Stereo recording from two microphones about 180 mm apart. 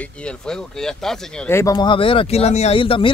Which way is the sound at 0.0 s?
5° left (ahead or behind).